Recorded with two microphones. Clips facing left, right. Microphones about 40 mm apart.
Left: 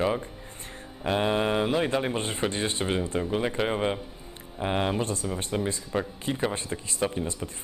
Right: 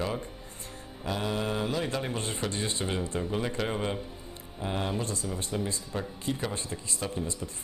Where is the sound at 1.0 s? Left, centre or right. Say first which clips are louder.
Left 6 dB; left.